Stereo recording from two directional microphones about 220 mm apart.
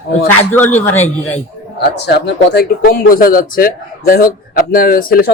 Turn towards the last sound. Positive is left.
turn(degrees=40)  # may be behind; listen again after turning